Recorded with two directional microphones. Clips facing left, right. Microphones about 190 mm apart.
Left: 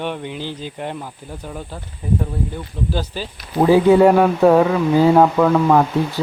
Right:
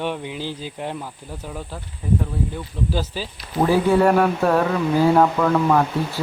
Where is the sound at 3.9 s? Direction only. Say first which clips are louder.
Left 5 dB; 10° left (ahead or behind).